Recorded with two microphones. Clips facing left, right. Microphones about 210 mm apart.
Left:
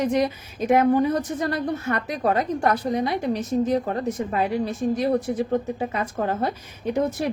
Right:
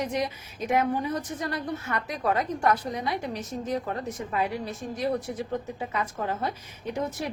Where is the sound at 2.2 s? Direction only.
30° left (ahead or behind).